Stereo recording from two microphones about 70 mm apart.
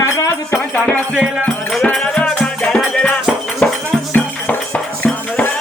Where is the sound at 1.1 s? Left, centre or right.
Centre.